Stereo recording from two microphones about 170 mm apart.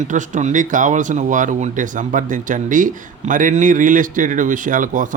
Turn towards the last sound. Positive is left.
turn(degrees=-50)  # may be behind; listen again after turning